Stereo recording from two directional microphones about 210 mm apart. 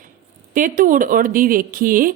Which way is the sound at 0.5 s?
40° right (ahead or behind).